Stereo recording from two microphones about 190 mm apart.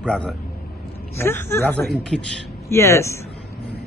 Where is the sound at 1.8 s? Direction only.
Centre (ahead or behind).